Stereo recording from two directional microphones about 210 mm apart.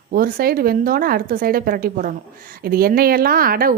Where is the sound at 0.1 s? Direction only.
45° right (ahead or behind).